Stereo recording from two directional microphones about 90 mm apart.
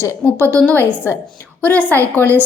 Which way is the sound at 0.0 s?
25° left (ahead or behind).